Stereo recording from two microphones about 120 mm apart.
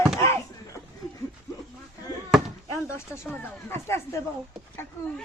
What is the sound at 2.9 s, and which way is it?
Speech, 20° left (ahead or behind).